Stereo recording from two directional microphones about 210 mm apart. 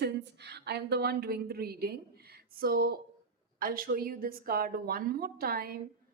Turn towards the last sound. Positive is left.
turn(degrees=-45)  # may be behind; listen again after turning